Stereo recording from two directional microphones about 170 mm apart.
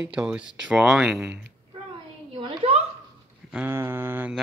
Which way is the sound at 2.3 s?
35° right (ahead or behind).